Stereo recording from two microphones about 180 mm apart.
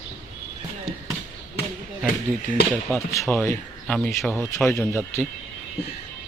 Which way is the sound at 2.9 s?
10° left (ahead or behind).